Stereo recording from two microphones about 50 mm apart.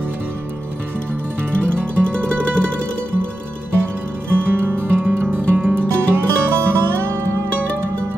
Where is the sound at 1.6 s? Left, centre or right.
Left.